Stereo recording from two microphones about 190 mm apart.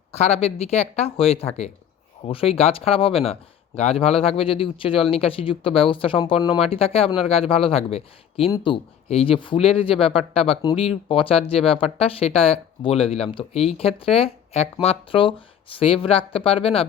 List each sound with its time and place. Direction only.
0.1 s speech: 35° left (ahead or behind)